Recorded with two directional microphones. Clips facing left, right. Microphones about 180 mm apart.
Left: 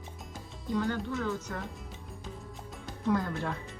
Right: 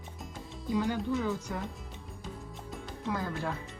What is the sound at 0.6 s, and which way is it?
Speech, 10° right (ahead or behind).